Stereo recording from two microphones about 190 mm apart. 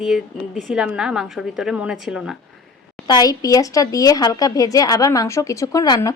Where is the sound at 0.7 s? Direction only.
5° right (ahead or behind).